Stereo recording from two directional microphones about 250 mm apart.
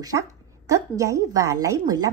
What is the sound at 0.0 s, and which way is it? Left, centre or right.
Speech, centre.